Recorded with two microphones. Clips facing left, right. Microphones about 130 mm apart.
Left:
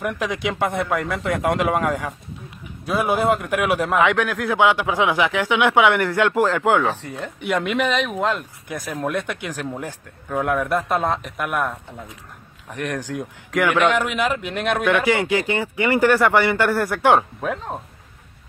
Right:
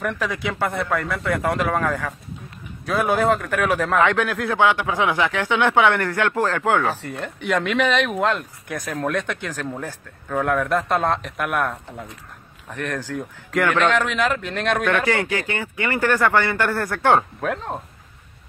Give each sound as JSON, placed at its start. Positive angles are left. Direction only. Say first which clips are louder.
{"t": 0.0, "sound": "a man's voice", "louder": "left 1 dB", "side_deg": 15}
{"t": 4.6, "sound": "a man's voice", "louder": "left 1 dB", "side_deg": 15}
{"t": 5.5, "sound": "speech", "louder": "even", "side_deg": 5}
{"t": 5.8, "sound": "a man's voice", "louder": "left 3 dB", "side_deg": 15}
{"t": 7.1, "sound": "speech", "louder": "even", "side_deg": 0}
{"t": 12.6, "sound": "a man's voice", "louder": "left 1 dB", "side_deg": 15}
{"t": 15.0, "sound": "a man's voice", "louder": "left 3 dB", "side_deg": 15}
{"t": 17.4, "sound": "speech", "louder": "right 1 dB", "side_deg": 0}